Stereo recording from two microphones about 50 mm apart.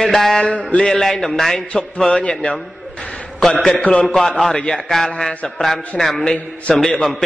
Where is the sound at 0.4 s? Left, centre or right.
Left.